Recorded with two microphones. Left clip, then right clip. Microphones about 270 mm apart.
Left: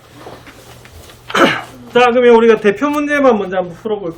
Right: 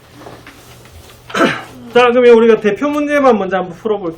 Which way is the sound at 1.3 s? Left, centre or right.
Centre.